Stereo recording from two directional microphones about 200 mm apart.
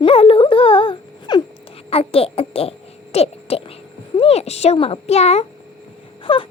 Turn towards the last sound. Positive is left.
turn(degrees=25)  # may be behind; listen again after turning